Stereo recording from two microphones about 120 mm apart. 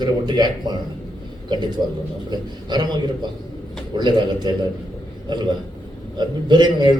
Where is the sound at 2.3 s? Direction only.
35° right (ahead or behind).